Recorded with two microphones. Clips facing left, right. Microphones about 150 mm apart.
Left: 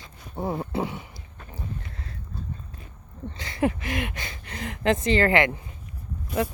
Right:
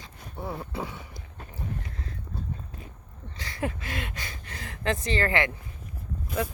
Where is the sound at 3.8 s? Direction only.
15° left (ahead or behind).